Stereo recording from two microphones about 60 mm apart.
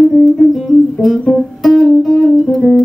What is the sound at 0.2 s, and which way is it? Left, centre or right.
Music, centre.